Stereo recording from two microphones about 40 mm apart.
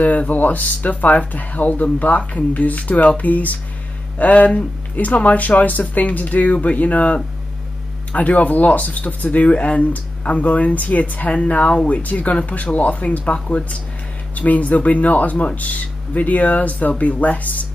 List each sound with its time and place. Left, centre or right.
0.0 s speech: left